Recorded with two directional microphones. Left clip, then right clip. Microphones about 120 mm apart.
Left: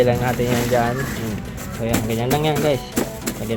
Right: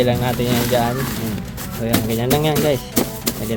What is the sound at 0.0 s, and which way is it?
Speech, 15° right (ahead or behind).